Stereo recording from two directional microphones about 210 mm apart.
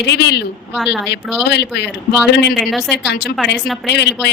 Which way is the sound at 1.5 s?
55° left (ahead or behind).